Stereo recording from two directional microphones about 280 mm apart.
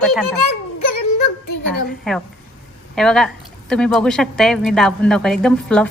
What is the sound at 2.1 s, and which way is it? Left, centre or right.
Speech, centre.